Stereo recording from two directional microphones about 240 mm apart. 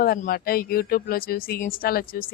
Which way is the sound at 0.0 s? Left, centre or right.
Left.